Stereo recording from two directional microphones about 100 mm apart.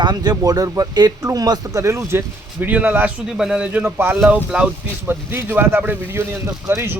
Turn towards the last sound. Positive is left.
turn(degrees=-25)  # may be behind; listen again after turning